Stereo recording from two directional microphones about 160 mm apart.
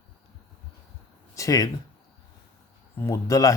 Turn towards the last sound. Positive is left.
turn(degrees=20)  # may be behind; listen again after turning